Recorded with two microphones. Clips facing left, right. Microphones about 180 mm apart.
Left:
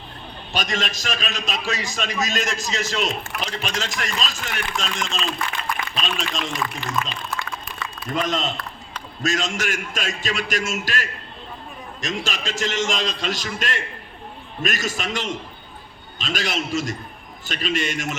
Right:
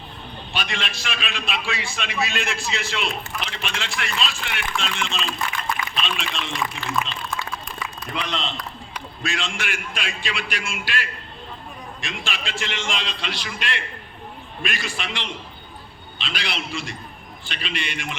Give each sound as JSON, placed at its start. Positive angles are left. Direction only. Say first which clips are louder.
{"t": 0.5, "sound": "a man's voice", "louder": "left 4 dB", "side_deg": 40}
{"t": 7.0, "sound": "speech", "louder": "even", "side_deg": 0}
{"t": 8.1, "sound": "a man's voice", "louder": "left 5 dB", "side_deg": 45}